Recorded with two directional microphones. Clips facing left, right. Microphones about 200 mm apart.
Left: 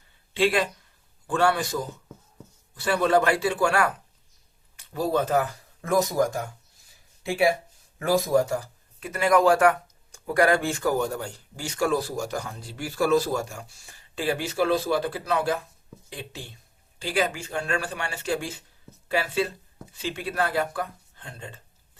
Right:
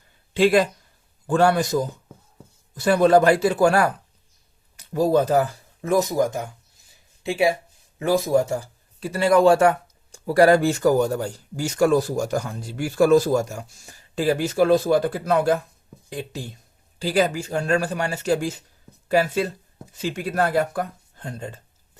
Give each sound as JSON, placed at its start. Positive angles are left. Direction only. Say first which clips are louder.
{"t": 0.3, "sound": "speech", "louder": "right 6 dB", "side_deg": -40}
{"t": 5.8, "sound": "speech", "louder": "right 3 dB", "side_deg": -20}